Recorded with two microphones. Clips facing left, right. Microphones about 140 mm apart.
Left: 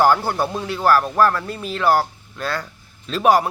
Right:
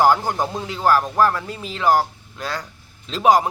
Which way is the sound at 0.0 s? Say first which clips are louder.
Even; 15° right (ahead or behind).